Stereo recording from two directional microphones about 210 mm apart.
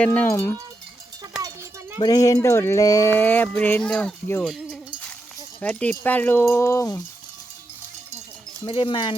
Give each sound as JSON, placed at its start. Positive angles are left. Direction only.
{"t": 0.0, "sound": "speech", "side_deg": 5}
{"t": 1.4, "sound": "a sound", "side_deg": -15}
{"t": 2.0, "sound": "speech", "side_deg": 20}
{"t": 4.4, "sound": "a sound", "side_deg": 0}
{"t": 5.5, "sound": "speech", "side_deg": 5}
{"t": 8.6, "sound": "speech", "side_deg": 25}